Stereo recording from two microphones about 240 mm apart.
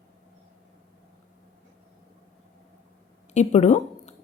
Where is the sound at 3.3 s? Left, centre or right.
Left.